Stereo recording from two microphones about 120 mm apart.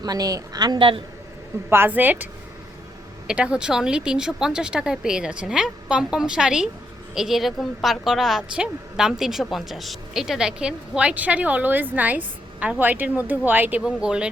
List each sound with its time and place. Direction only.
0.0 s a woman's voice: 30° right (ahead or behind)
1.7 s speech: 15° right (ahead or behind)
3.2 s a woman's voice: 10° right (ahead or behind)